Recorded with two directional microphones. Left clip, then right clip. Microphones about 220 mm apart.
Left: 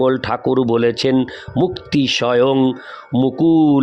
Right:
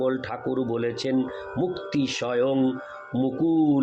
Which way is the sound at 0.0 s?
50° left (ahead or behind).